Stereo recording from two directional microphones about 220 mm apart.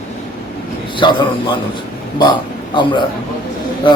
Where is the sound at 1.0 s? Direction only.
20° left (ahead or behind).